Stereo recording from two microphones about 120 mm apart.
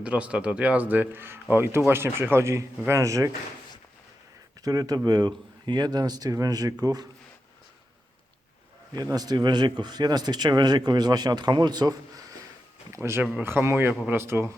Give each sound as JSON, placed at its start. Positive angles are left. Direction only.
{"t": 0.0, "sound": "speech", "side_deg": -10}
{"t": 4.6, "sound": "speech", "side_deg": -30}
{"t": 8.9, "sound": "a man's voice", "side_deg": -30}